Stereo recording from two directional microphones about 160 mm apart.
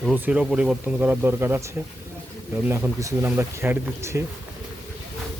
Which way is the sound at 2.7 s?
15° right (ahead or behind).